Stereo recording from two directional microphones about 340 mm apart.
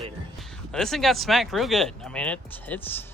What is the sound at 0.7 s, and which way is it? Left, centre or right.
Speech, centre.